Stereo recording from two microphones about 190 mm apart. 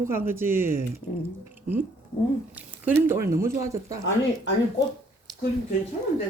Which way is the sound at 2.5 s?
10° right (ahead or behind).